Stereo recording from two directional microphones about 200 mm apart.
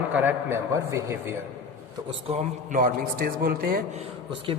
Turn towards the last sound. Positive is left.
turn(degrees=-25)  # may be behind; listen again after turning